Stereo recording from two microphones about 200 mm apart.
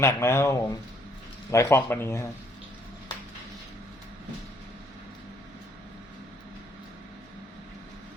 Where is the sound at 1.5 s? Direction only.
10° left (ahead or behind).